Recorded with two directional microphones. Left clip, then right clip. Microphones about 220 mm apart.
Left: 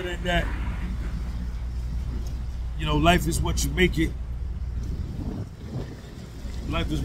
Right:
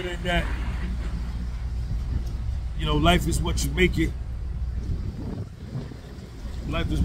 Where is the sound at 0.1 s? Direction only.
10° left (ahead or behind).